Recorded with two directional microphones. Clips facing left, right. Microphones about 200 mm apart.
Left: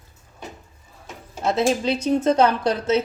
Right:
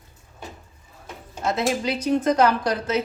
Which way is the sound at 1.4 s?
30° left (ahead or behind).